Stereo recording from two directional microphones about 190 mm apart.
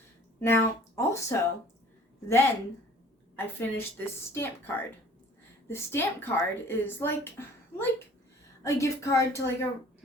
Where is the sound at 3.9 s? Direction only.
10° left (ahead or behind).